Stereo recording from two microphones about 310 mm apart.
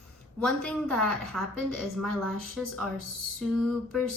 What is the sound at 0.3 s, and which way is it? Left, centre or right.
A woman's voice, centre.